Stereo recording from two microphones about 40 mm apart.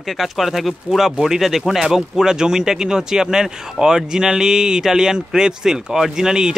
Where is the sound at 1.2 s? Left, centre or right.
Centre.